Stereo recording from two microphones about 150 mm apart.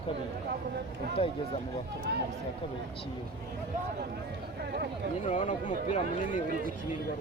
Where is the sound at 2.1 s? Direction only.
90° right.